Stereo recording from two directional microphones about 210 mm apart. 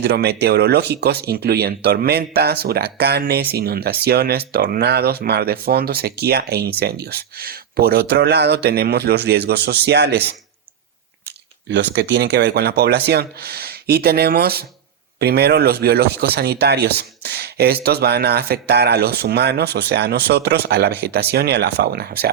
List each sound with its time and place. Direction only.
0.0 s speech: 50° right (ahead or behind)
11.7 s speech: 55° right (ahead or behind)